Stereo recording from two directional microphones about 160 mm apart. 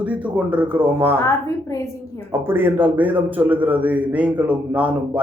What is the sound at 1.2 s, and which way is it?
Speech, 20° left (ahead or behind).